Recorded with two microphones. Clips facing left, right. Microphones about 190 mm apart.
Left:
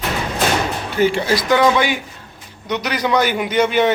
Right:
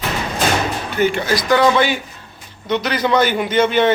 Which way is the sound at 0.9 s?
30° left (ahead or behind).